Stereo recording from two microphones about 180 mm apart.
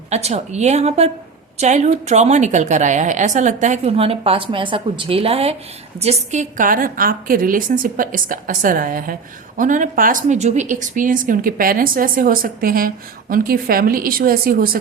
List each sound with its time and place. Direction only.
0.1 s a woman's voice: 35° right (ahead or behind); by 14.8 s 55° right (ahead or behind)